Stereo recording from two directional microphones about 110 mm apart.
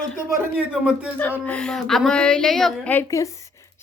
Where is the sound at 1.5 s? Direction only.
10° left (ahead or behind).